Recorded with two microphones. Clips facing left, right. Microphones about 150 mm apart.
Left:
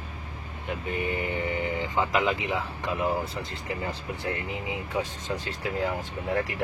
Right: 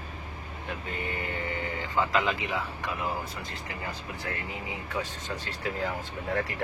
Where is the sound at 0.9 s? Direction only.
15° left (ahead or behind).